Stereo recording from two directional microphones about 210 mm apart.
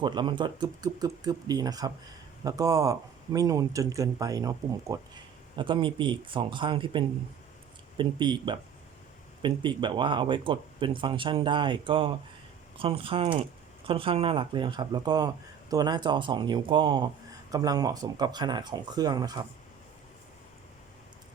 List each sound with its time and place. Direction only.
0.0 s speech: 20° right (ahead or behind)